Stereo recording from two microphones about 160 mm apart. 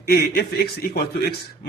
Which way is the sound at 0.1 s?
70° left (ahead or behind).